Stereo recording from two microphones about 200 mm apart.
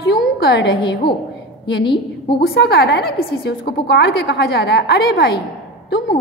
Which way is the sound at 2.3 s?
55° left (ahead or behind).